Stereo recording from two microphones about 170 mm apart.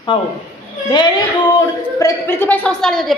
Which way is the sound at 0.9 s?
25° left (ahead or behind).